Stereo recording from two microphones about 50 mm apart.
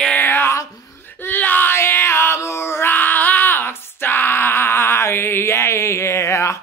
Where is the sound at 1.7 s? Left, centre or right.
Left.